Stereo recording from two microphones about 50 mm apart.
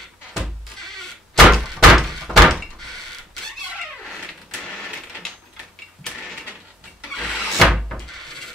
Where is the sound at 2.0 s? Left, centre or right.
Centre.